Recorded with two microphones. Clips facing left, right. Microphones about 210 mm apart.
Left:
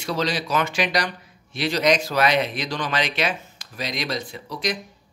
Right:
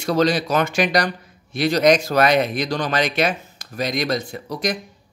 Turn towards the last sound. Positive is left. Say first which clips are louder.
# right 3 dB
turn(degrees=-45)  # may be behind; listen again after turning